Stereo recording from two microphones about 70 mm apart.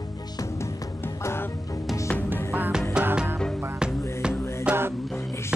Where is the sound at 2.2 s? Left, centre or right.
Right.